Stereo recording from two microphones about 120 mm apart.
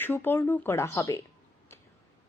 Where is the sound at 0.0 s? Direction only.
20° left (ahead or behind).